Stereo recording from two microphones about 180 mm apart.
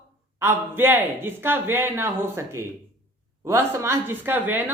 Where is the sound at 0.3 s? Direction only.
10° right (ahead or behind).